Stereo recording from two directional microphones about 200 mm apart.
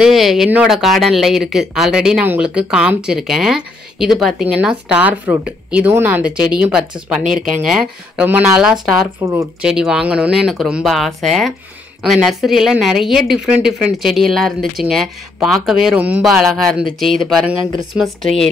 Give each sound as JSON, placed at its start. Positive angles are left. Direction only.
{"t": 0.0, "sound": "speech", "side_deg": 0}
{"t": 9.6, "sound": "speech", "side_deg": -5}